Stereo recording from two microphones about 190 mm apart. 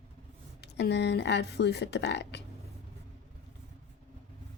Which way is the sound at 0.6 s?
60° left (ahead or behind).